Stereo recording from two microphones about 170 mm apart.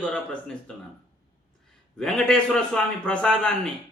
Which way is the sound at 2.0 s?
5° left (ahead or behind).